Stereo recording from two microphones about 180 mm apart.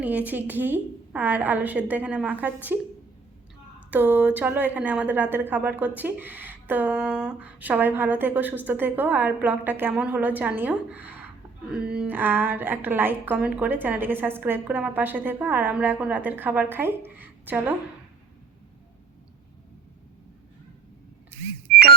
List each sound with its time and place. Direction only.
0.0 s a woman's voice: 10° right (ahead or behind)
3.9 s a woman's voice: 10° right (ahead or behind)
21.7 s music: 55° right (ahead or behind)